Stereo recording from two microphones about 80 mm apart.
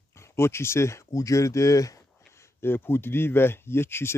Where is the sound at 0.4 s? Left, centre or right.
Left.